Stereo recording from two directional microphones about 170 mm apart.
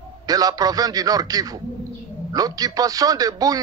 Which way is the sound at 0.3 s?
20° right (ahead or behind).